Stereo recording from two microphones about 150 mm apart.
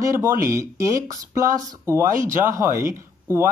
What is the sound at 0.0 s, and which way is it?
Speech, 20° right (ahead or behind).